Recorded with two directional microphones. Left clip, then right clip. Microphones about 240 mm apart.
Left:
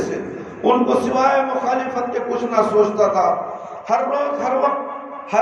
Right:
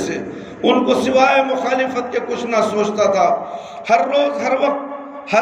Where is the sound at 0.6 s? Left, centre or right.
Right.